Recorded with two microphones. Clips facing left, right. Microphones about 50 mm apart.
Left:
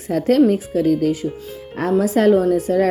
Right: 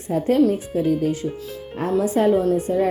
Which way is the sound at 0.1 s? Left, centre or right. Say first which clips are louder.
Left 3 dB; left.